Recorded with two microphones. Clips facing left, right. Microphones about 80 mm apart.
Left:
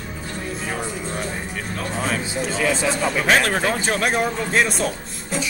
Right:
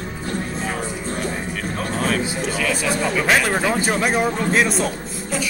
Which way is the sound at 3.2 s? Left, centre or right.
Centre.